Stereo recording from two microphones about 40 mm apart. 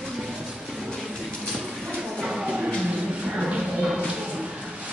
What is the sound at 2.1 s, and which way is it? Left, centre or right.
Bird, centre.